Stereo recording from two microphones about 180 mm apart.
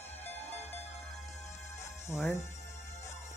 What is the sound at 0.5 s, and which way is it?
Music, 35° left (ahead or behind).